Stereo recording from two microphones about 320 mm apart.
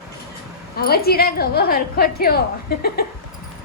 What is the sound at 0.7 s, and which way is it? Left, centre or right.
A woman's voice, left.